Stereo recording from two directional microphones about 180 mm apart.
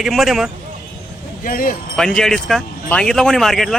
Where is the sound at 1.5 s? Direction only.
50° left (ahead or behind).